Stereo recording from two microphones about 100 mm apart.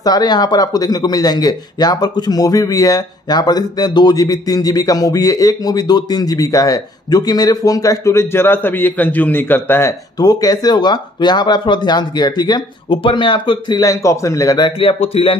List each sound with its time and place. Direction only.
0.0 s speech: 45° left (ahead or behind); by 9.9 s 25° left (ahead or behind)
10.1 s speech: 40° left (ahead or behind)
14.8 s speech: 70° left (ahead or behind)